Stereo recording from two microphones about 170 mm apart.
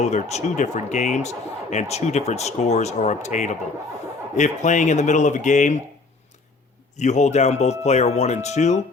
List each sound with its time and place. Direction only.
0.0 s speech: 40° left (ahead or behind)
6.9 s speech: 45° left (ahead or behind)